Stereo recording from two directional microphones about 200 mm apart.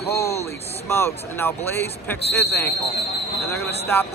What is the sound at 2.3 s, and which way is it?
Speech, 55° left (ahead or behind).